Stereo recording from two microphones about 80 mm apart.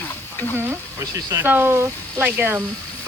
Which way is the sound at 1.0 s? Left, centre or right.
Right.